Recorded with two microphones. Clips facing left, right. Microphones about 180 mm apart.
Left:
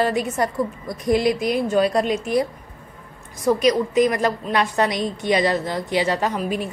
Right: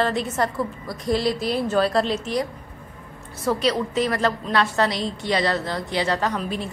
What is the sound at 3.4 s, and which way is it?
A woman's voice, 15° left (ahead or behind).